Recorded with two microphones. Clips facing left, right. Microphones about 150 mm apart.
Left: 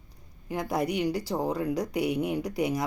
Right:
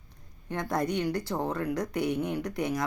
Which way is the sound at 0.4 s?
10° left (ahead or behind).